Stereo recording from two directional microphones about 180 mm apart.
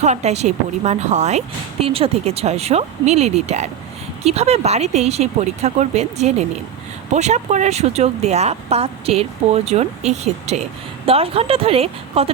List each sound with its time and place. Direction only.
0.0 s speech: 40° right (ahead or behind)